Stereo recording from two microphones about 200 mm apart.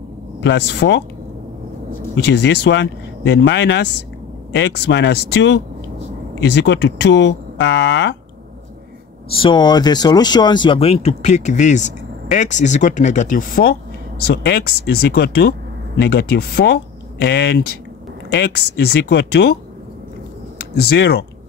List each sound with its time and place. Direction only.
0.4 s speech: 60° left (ahead or behind)
2.1 s speech: 60° left (ahead or behind)
9.3 s speech: 25° left (ahead or behind); by 19.5 s 55° left (ahead or behind)
20.9 s speech: 55° left (ahead or behind)